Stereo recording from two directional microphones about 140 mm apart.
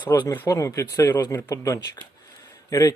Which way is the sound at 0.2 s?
25° left (ahead or behind).